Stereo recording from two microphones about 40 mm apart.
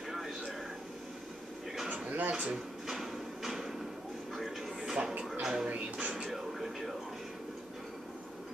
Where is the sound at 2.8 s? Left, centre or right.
Centre.